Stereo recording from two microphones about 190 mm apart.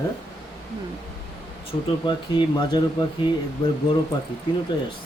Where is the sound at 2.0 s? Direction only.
25° left (ahead or behind).